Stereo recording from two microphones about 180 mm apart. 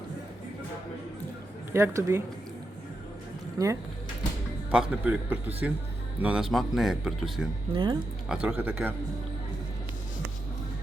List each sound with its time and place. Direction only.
1.7 s speech: 15° right (ahead or behind)
3.6 s speech: 20° right (ahead or behind)
4.7 s speech: 5° right (ahead or behind)
7.7 s speech: 25° right (ahead or behind)
8.3 s speech: 5° right (ahead or behind)